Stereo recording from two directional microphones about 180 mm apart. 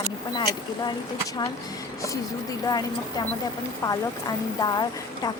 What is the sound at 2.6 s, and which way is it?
A woman's voice, 20° left (ahead or behind).